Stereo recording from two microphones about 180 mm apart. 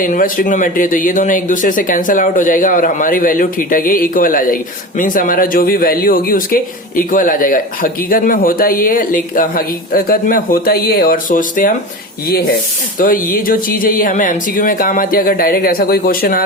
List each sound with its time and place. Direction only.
0.0 s speech: 50° left (ahead or behind)
13.0 s speech: 50° left (ahead or behind)